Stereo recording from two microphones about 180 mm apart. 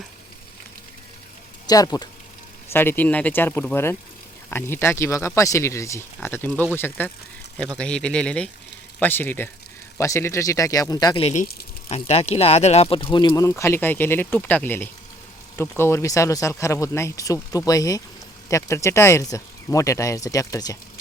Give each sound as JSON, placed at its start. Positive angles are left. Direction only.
{"t": 1.6, "sound": "speech", "side_deg": 20}
{"t": 11.2, "sound": "speech", "side_deg": 35}